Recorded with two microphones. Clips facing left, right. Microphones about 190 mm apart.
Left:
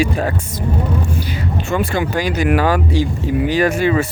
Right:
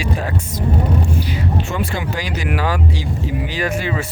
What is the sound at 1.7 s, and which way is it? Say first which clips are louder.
Speech: left 5 dB; 50° left (ahead or behind).